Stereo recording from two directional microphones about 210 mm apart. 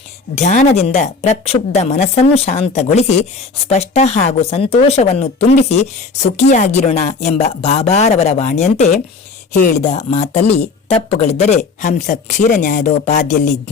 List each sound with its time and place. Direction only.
0.3 s speech: 35° left (ahead or behind)